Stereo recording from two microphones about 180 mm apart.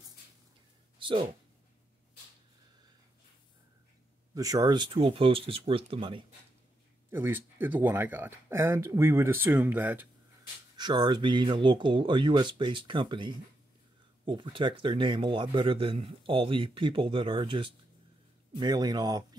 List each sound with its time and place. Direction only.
0.9 s a sound: 30° right (ahead or behind)
4.4 s speech: 20° right (ahead or behind)
7.1 s speech: 10° right (ahead or behind)
10.8 s speech: 25° right (ahead or behind)